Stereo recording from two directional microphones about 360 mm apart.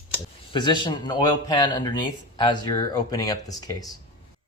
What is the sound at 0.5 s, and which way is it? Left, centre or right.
Speech, centre.